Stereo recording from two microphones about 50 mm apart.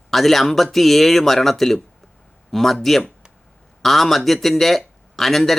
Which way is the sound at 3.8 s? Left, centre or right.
Centre.